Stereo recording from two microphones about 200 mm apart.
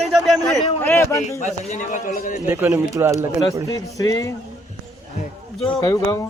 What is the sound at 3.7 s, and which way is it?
Speech, 15° left (ahead or behind).